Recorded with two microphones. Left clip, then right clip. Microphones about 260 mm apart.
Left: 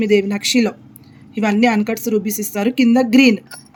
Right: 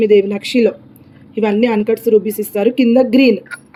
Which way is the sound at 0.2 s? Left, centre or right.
Left.